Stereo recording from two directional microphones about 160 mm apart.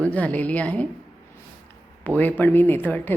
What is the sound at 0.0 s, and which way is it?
Speech, 10° left (ahead or behind).